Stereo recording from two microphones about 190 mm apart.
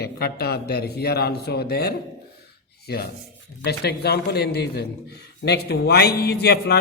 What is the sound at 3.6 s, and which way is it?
A man's voice, 60° left (ahead or behind).